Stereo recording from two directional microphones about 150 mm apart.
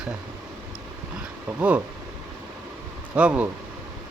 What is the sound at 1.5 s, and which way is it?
Speech, 10° right (ahead or behind).